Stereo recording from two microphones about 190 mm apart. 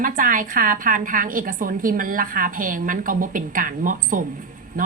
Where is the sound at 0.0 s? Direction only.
45° right (ahead or behind).